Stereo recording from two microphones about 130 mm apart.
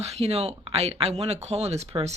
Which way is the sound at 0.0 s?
55° right (ahead or behind).